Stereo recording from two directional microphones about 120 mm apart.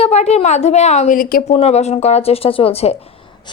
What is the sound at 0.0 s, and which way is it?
A woman's voice, 65° left (ahead or behind).